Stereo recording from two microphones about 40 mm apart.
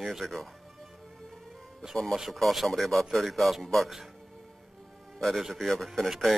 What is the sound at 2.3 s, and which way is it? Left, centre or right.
Speech, centre.